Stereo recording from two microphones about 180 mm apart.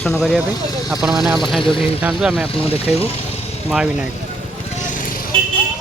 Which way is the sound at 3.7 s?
5° right (ahead or behind).